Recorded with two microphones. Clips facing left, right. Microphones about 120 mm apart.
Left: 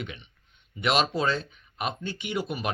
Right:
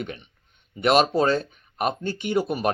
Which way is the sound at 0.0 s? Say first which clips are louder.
Right 5 dB; 40° right (ahead or behind).